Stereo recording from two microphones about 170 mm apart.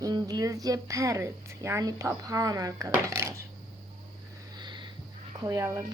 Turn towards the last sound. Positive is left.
turn(degrees=-15)  # may be behind; listen again after turning